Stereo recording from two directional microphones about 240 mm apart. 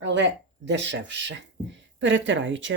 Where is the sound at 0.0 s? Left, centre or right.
Right.